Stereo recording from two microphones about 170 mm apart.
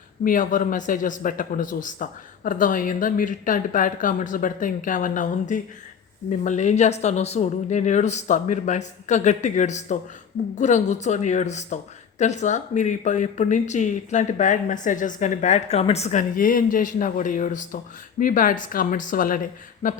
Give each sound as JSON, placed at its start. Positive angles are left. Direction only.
{"t": 0.3, "sound": "speech", "side_deg": 50}
{"t": 16.3, "sound": "speech", "side_deg": 55}